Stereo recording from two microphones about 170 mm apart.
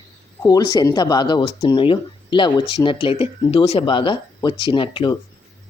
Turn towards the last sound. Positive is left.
turn(degrees=30)  # may be behind; listen again after turning